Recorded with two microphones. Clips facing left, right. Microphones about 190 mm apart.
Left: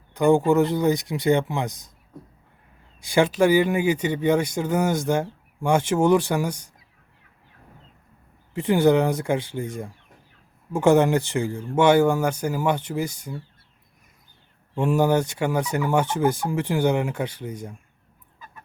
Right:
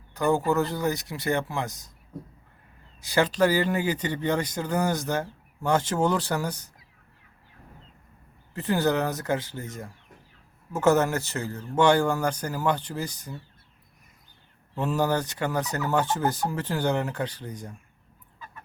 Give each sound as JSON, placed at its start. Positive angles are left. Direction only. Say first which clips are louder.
{"t": 0.2, "sound": "speech", "louder": "left 6 dB", "side_deg": 15}
{"t": 3.2, "sound": "speech", "louder": "left 4 dB", "side_deg": 10}
{"t": 8.5, "sound": "speech", "louder": "left 6 dB", "side_deg": 15}
{"t": 10.7, "sound": "speech", "louder": "left 4 dB", "side_deg": 15}
{"t": 14.8, "sound": "speech", "louder": "left 5 dB", "side_deg": 10}